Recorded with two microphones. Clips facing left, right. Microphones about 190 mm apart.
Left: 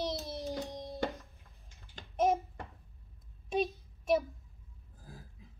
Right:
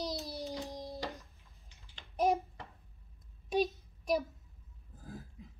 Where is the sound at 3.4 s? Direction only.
Centre (ahead or behind).